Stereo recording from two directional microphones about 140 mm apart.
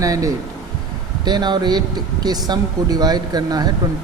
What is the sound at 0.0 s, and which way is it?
A man's voice, 25° right (ahead or behind).